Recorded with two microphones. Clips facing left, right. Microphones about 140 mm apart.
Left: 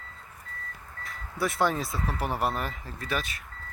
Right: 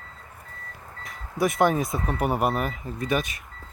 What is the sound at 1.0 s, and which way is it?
Speech, 20° right (ahead or behind).